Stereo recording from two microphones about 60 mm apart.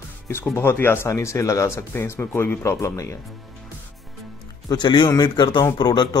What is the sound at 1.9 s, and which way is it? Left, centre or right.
Speech, left.